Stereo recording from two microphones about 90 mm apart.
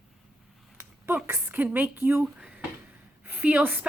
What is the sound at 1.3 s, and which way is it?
Speech, 25° right (ahead or behind).